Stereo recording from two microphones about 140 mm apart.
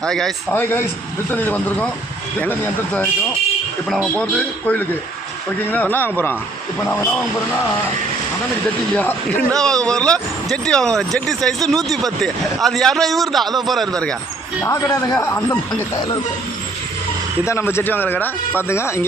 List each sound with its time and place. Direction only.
0.0 s speech: 5° left (ahead or behind)
0.5 s speech: 15° left (ahead or behind)
3.8 s speech: centre (ahead or behind)
4.1 s speech: 10° left (ahead or behind)
9.0 s speech: 10° left (ahead or behind)
14.6 s speech: 20° left (ahead or behind)
17.4 s speech: 20° left (ahead or behind)